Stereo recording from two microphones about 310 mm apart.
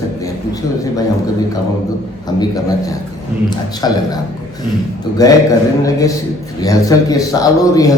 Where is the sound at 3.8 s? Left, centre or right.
Centre.